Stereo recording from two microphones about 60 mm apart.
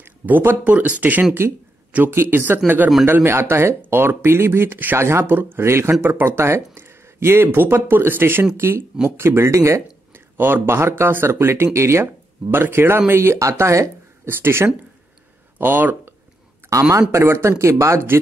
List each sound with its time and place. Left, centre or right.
0.0 s speech: right
0.7 s speech: right
2.0 s speech: right
4.9 s speech: right
5.2 s speech: right
8.5 s speech: right
12.4 s speech: right
14.2 s speech: right
16.6 s a sound: right
17.1 s speech: right